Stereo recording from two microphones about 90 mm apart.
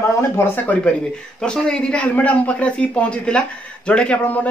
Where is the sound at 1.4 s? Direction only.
10° left (ahead or behind).